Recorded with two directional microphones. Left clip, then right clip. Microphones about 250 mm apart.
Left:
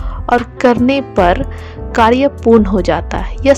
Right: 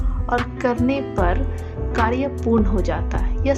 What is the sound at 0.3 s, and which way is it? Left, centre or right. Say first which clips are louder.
A woman's voice: left 10 dB; left.